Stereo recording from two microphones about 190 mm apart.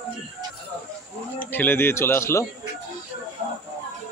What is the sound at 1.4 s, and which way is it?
Speech, 10° left (ahead or behind).